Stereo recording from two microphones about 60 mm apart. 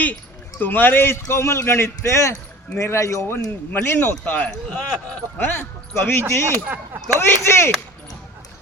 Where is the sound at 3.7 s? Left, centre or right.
Left.